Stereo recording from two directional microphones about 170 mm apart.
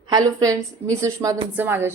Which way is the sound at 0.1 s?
20° right (ahead or behind).